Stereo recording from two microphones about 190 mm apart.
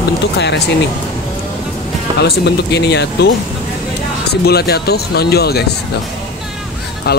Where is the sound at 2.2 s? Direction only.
60° left (ahead or behind).